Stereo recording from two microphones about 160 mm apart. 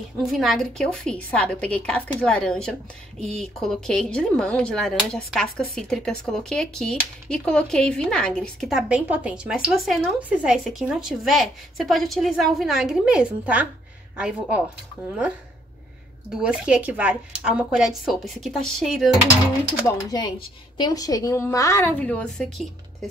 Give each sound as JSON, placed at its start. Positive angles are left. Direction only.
{"t": 0.2, "sound": "speech", "side_deg": 0}
{"t": 16.3, "sound": "speech", "side_deg": -5}
{"t": 20.1, "sound": "a woman's voice", "side_deg": 25}